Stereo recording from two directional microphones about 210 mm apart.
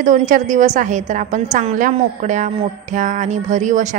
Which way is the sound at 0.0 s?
35° right (ahead or behind).